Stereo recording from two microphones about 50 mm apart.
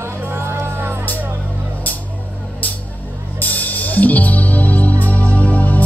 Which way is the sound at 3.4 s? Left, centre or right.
Left.